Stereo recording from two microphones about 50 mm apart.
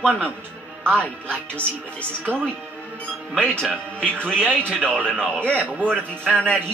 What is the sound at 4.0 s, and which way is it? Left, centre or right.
Speech, left.